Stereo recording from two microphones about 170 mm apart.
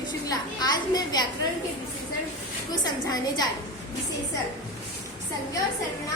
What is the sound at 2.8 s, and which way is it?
Speech, 25° left (ahead or behind).